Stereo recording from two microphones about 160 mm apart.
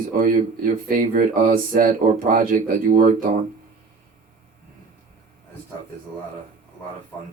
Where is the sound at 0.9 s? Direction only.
60° right (ahead or behind).